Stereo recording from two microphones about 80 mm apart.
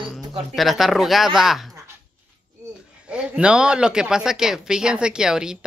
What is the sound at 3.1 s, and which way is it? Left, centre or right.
Speech, centre.